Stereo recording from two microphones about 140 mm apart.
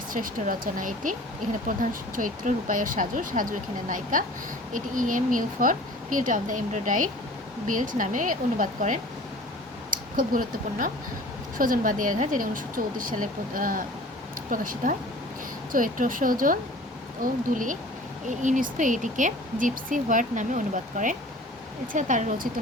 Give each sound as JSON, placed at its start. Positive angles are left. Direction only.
{"t": 0.1, "sound": "speech", "side_deg": -75}
{"t": 9.9, "sound": "speech", "side_deg": -80}